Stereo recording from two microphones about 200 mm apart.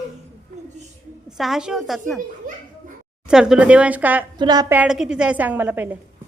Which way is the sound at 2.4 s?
45° right (ahead or behind).